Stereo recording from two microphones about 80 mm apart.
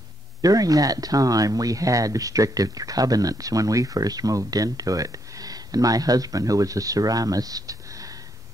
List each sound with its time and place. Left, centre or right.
0.4 s speech: right